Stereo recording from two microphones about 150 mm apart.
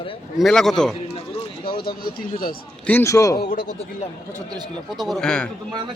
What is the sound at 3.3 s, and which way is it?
Speech, 90° left.